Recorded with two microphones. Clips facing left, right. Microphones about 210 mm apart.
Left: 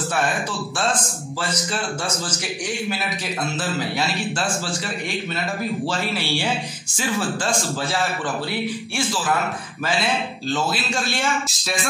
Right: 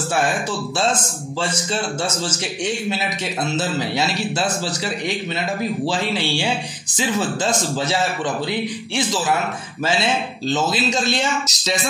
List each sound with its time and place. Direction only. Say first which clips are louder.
1.5 s a man's voice: right 2 dB; 25° right (ahead or behind)
4.4 s a man's voice: right 3 dB; 40° right (ahead or behind)
7.0 s a man's voice: right 3 dB; 20° right (ahead or behind)